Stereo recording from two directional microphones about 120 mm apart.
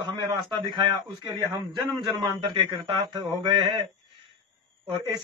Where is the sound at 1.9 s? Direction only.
35° right (ahead or behind).